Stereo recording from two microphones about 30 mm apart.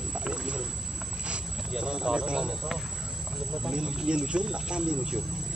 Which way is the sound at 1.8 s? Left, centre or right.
Right.